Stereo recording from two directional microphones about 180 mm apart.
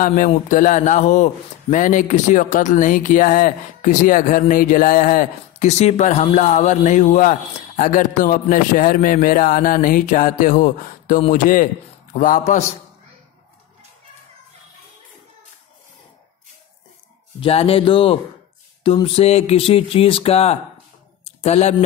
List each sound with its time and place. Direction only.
0.0 s a man's voice: 50° left (ahead or behind)
17.4 s speech: 35° left (ahead or behind)
21.2 s a sound: 35° left (ahead or behind)